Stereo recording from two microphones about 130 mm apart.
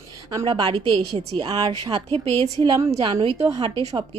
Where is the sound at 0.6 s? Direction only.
45° right (ahead or behind).